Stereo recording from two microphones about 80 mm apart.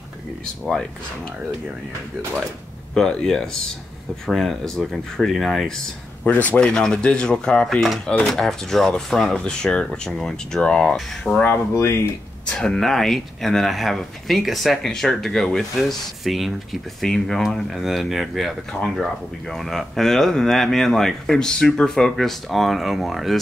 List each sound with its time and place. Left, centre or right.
0.7 s speech: centre
2.9 s speech: centre
6.2 s speech: centre
7.8 s speech: centre
11.7 s speech: left
12.4 s speech: centre